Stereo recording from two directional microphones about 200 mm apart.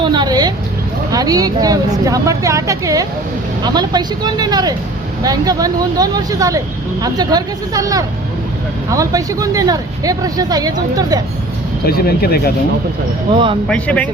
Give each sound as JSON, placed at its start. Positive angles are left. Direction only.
{"t": 0.0, "sound": "a woman's voice", "side_deg": -20}
{"t": 11.9, "sound": "speech", "side_deg": 50}
{"t": 13.3, "sound": "speech", "side_deg": -25}
{"t": 13.7, "sound": "speech", "side_deg": 5}